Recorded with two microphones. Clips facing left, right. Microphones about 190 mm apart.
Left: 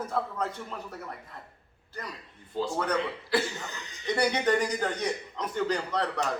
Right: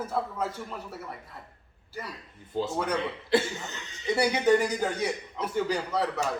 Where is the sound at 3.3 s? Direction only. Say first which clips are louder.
Right 3 dB; 25° right (ahead or behind).